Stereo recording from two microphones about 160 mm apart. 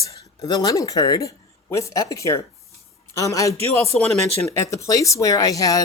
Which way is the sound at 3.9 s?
5° left (ahead or behind).